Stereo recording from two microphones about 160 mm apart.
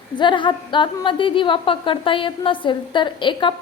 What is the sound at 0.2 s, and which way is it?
A woman's voice, 30° left (ahead or behind).